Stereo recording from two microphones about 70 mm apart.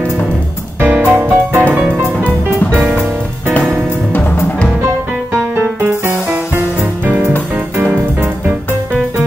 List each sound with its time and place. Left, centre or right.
0.7 s music: right
1.8 s music: centre
4.8 s music: right